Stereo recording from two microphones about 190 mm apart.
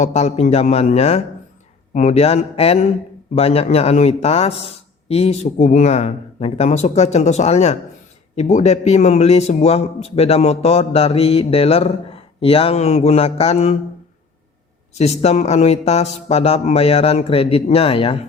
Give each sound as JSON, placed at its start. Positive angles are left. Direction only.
{"t": 0.0, "sound": "a man's voice", "side_deg": 35}
{"t": 14.9, "sound": "a man's voice", "side_deg": 35}